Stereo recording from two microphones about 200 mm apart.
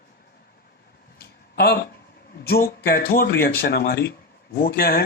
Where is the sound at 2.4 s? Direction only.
50° left (ahead or behind).